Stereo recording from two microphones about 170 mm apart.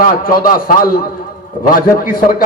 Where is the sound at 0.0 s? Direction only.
55° left (ahead or behind).